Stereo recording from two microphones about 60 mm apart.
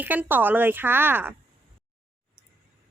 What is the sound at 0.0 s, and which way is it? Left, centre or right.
A woman's voice, right.